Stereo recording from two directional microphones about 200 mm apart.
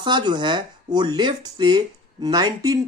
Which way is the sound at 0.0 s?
25° right (ahead or behind).